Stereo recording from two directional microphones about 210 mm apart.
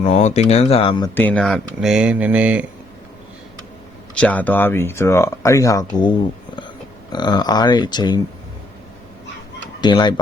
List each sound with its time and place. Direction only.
0.0 s speech: 35° left (ahead or behind)
1.1 s speech: 5° left (ahead or behind)
4.1 s speech: 5° left (ahead or behind)
9.8 s speech: 20° left (ahead or behind)